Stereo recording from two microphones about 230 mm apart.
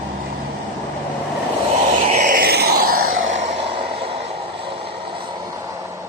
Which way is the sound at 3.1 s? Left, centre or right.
Right.